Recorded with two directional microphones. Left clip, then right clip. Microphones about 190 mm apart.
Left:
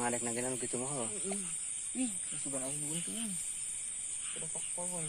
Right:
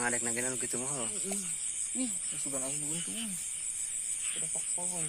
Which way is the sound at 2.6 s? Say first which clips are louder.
Right 2 dB; 10° left (ahead or behind).